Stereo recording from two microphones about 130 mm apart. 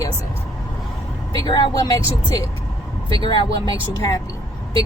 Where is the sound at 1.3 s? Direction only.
35° left (ahead or behind).